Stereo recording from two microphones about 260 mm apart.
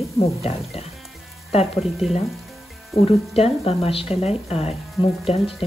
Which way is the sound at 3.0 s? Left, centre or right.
Left.